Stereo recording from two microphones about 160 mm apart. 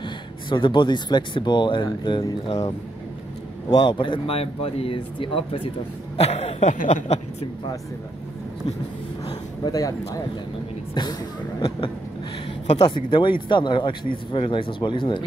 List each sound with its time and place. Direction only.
0.0 s speech: 30° left (ahead or behind)
3.7 s speech: 30° left (ahead or behind)
9.2 s speech: 25° left (ahead or behind)
12.7 s speech: 30° left (ahead or behind)